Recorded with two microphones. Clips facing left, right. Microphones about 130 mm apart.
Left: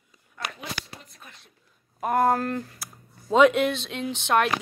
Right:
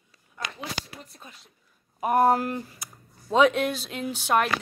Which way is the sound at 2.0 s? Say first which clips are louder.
Right 1 dB; 15° right (ahead or behind).